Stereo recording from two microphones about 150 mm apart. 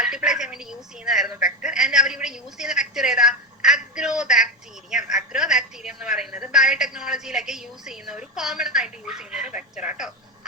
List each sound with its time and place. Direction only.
0.0 s a woman's voice: 5° right (ahead or behind)